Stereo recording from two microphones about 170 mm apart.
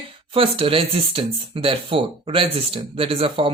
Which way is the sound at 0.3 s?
35° right (ahead or behind).